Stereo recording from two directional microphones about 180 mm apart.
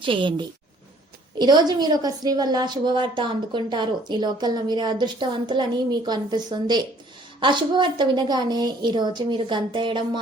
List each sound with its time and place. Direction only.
0.0 s a woman's voice: 25° right (ahead or behind)